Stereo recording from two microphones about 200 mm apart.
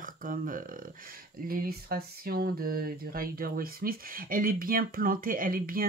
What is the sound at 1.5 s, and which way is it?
Speech, 45° right (ahead or behind).